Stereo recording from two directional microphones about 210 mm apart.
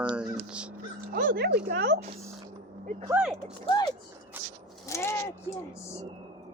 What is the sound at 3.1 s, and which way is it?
Speech, 5° right (ahead or behind).